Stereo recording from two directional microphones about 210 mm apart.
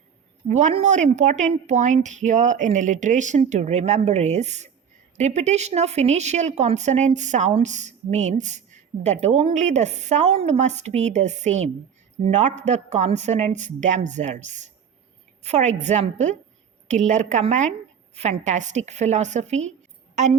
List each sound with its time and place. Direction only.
0.4 s a woman's voice: 35° right (ahead or behind)